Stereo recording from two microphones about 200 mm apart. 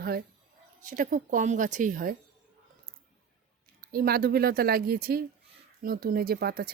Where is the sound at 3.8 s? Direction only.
50° right (ahead or behind).